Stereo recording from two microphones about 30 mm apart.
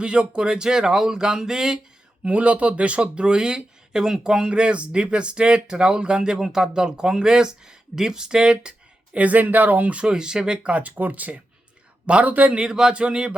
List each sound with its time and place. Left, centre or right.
0.0 s speech: right; by 1.8 s centre
2.2 s speech: right
9.1 s speech: right
10.1 s speech: right
10.7 s speech: right
10.9 s speech: right
12.0 s speech: right
12.5 s speech: right
12.9 s speech: right